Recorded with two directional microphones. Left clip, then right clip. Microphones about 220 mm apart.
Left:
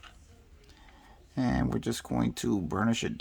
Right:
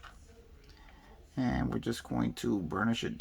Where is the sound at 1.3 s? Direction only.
35° left (ahead or behind).